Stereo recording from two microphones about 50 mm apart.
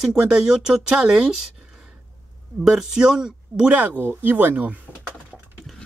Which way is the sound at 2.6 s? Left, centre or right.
Centre.